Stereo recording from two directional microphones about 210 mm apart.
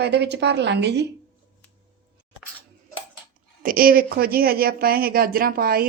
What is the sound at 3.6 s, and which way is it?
Speech, 45° right (ahead or behind).